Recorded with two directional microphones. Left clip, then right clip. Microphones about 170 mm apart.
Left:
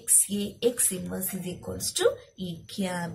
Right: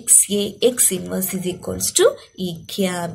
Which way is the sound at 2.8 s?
35° right (ahead or behind).